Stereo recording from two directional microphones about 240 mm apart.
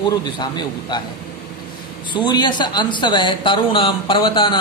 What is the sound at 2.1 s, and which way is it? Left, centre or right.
Speech, centre.